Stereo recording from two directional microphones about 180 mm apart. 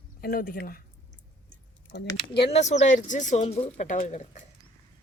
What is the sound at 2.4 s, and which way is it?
Speech, 35° left (ahead or behind).